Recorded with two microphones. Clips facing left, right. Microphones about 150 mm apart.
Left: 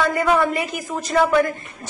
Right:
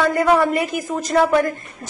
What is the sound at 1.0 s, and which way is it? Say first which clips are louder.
Speech: right 1 dB; 45° right (ahead or behind).